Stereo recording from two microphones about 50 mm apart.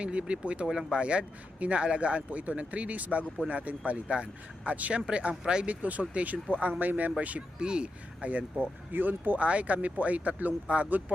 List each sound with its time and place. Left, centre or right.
0.0 s speech: right
5.6 s speech: right
7.6 s speech: centre
8.3 s speech: right
9.4 s speech: right